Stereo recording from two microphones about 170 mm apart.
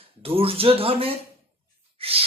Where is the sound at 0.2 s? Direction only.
35° right (ahead or behind).